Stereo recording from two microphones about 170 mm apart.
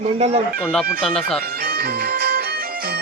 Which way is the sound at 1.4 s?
65° right (ahead or behind).